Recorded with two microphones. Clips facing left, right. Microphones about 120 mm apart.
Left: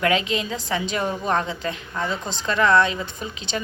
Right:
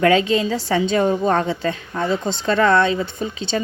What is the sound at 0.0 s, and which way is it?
A woman's voice, 30° right (ahead or behind).